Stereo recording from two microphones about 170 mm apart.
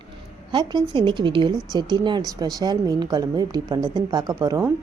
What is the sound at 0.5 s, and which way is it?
A woman's voice, 25° right (ahead or behind).